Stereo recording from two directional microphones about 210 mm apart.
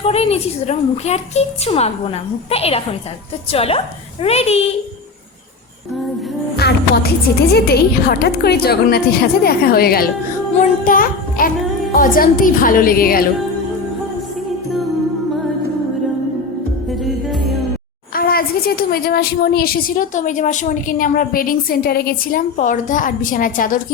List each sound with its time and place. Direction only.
0.0 s a woman's voice: 30° left (ahead or behind)
6.6 s music: 50° left (ahead or behind)
7.5 s a woman's voice: 50° left (ahead or behind)
16.9 s music: centre (ahead or behind)
18.1 s a woman's voice: 45° left (ahead or behind)